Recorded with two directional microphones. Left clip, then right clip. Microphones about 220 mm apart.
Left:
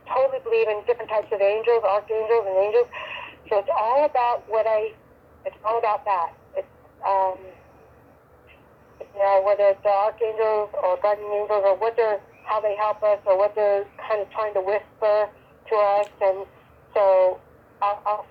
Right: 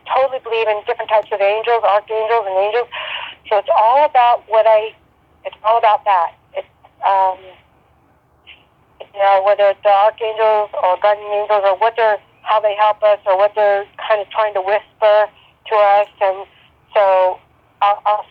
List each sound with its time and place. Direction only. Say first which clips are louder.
0.0 s speech: right 6 dB; 25° right (ahead or behind)
9.1 s speech: right 7 dB; 25° right (ahead or behind)
17.7 s a sound: right 9 dB; 25° right (ahead or behind)